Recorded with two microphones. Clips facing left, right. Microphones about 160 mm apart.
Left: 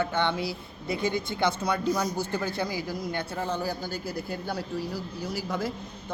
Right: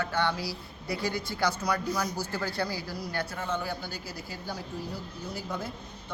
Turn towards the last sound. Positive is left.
turn(degrees=90)